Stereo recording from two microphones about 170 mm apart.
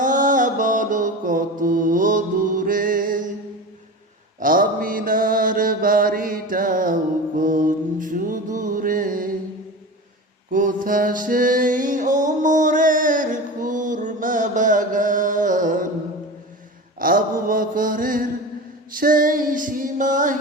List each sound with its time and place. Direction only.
0.0 s music: 50° right (ahead or behind)
4.4 s mantra: 55° right (ahead or behind)
10.5 s music: 50° right (ahead or behind)
17.0 s mantra: 55° right (ahead or behind)
18.9 s female singing: 55° right (ahead or behind)